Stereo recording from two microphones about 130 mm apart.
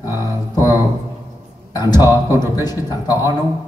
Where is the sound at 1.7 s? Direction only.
30° left (ahead or behind).